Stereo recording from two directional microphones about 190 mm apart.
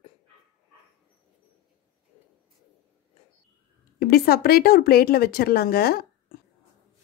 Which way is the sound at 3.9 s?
55° left (ahead or behind).